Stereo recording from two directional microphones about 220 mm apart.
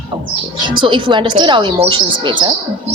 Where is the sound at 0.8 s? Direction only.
20° right (ahead or behind).